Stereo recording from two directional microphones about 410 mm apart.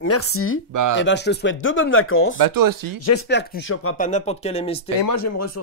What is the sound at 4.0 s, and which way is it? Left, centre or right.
Speech, centre.